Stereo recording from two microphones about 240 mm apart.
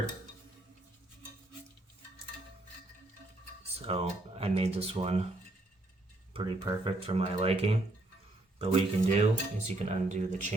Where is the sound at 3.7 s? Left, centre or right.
Right.